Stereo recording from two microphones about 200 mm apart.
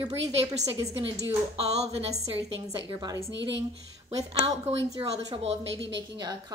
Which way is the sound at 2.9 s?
20° right (ahead or behind).